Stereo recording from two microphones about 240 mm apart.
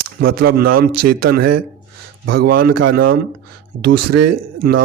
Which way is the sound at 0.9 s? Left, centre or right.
Right.